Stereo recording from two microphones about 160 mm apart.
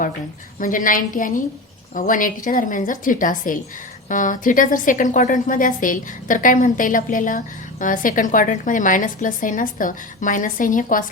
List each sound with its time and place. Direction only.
0.6 s a woman's voice: 55° left (ahead or behind)